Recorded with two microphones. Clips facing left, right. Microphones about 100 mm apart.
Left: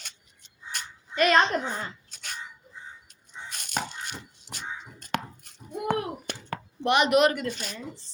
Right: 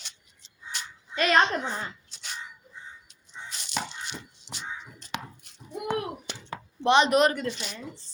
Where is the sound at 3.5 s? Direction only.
50° left (ahead or behind).